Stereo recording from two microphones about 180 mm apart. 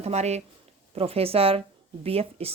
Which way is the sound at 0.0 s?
35° right (ahead or behind).